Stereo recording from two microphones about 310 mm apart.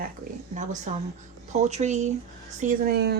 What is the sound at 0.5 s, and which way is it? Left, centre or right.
Speech, right.